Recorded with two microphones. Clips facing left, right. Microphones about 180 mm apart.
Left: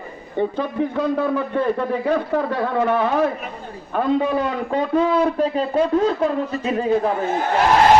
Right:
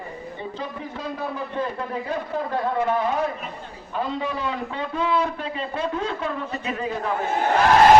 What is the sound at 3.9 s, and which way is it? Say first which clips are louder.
A man's voice: left 8 dB; 55° left (ahead or behind).